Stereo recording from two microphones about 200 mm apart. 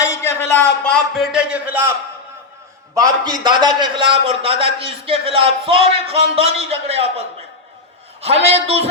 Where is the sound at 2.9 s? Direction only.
20° right (ahead or behind).